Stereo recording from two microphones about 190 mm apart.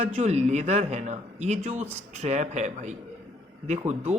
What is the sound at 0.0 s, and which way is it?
Speech, 35° right (ahead or behind).